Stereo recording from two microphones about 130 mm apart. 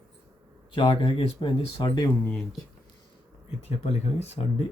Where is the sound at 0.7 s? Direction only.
40° left (ahead or behind).